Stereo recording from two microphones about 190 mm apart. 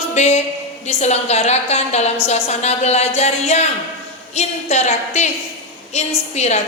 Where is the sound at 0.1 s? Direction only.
35° left (ahead or behind).